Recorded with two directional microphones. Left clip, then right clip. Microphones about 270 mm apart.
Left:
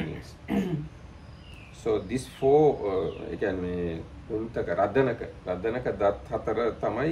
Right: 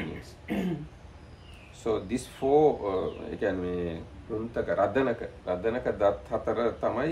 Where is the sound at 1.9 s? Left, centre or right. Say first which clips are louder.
Left 2 dB; centre.